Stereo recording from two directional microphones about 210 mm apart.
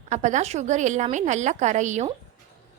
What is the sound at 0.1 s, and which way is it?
A woman's voice, 35° right (ahead or behind).